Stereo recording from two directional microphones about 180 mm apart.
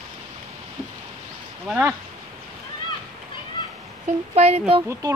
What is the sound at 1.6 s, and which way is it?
Speech, 10° right (ahead or behind).